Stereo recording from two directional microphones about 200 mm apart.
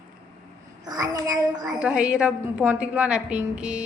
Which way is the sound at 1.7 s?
5° right (ahead or behind).